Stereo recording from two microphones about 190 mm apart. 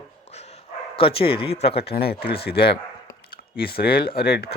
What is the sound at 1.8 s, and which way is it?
Speech, 55° left (ahead or behind).